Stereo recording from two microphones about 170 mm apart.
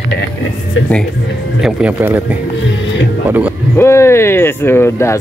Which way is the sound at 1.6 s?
10° right (ahead or behind).